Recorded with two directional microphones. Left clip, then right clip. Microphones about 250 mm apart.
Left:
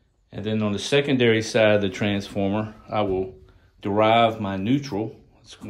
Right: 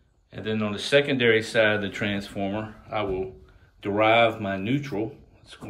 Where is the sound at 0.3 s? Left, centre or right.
Centre.